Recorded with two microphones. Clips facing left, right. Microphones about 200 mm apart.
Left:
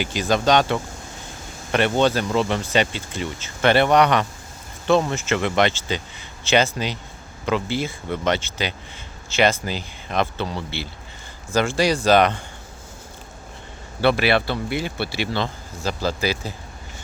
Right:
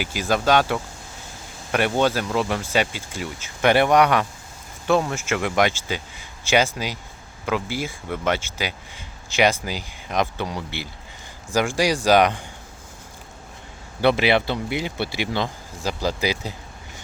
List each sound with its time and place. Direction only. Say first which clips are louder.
0.0 s speech: left 2 dB; 10° right (ahead or behind)
14.0 s speech: even; 20° right (ahead or behind)